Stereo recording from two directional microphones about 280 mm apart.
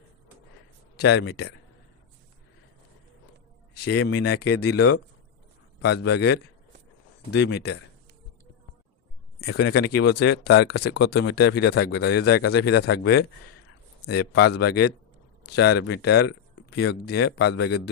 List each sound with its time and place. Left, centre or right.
0.9 s speech: left
4.1 s speech: left
4.7 s speech: left
6.1 s speech: left
9.5 s speech: left